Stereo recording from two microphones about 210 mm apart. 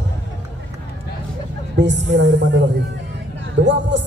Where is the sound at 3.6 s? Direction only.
60° right (ahead or behind).